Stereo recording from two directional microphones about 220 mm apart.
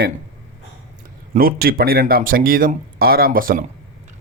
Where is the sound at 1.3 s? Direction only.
40° right (ahead or behind).